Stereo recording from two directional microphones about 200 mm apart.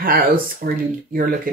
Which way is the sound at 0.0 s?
45° right (ahead or behind).